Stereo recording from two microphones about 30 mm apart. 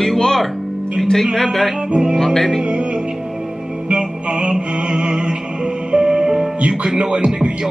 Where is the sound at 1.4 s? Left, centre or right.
Centre.